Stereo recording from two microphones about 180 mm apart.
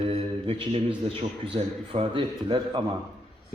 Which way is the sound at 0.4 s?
30° right (ahead or behind).